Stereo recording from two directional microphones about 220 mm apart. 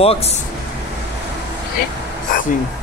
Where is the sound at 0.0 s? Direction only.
25° left (ahead or behind).